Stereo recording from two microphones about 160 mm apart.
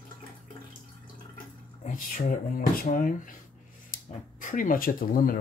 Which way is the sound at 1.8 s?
60° left (ahead or behind).